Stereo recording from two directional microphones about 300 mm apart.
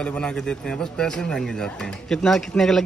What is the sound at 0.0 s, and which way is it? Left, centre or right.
A man's voice, centre.